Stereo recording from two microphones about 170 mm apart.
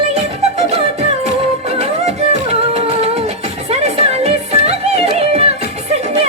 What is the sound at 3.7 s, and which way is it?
Music, 40° right (ahead or behind).